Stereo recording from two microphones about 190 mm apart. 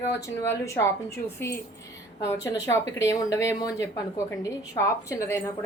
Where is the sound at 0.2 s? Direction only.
15° left (ahead or behind).